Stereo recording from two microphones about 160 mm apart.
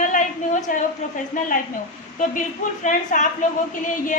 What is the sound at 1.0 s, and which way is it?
Speech, 45° left (ahead or behind).